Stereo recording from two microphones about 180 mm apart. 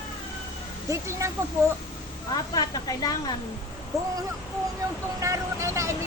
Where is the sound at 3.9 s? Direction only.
Centre (ahead or behind).